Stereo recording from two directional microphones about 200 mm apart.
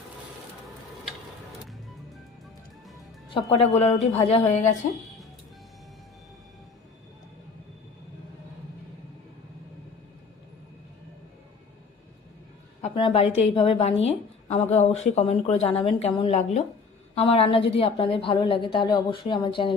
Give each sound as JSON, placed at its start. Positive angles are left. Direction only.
{"t": 3.3, "sound": "speech", "side_deg": 30}
{"t": 12.8, "sound": "a woman's voice", "side_deg": 25}